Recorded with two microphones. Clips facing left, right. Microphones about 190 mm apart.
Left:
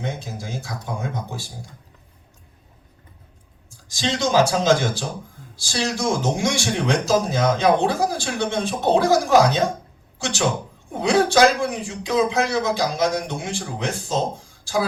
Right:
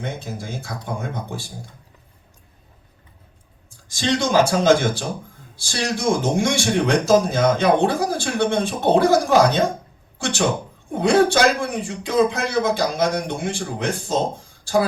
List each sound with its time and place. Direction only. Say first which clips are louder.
0.0 s a man's voice: even; 55° right (ahead or behind)
3.7 s a man's voice: right 3 dB; 60° right (ahead or behind)